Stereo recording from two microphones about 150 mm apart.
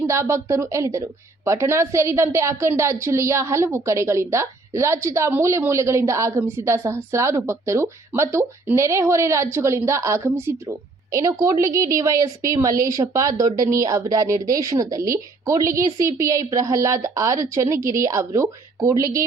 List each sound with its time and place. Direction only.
0.1 s a woman's voice: 20° right (ahead or behind)